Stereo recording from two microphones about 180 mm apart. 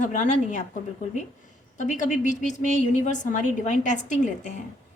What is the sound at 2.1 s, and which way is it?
A woman's voice, 45° left (ahead or behind).